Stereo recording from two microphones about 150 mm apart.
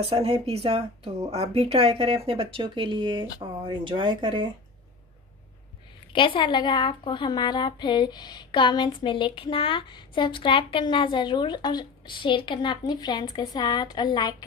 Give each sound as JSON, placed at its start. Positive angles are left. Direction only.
{"t": 0.0, "sound": "speech", "side_deg": -40}
{"t": 6.1, "sound": "a woman's voice", "side_deg": 35}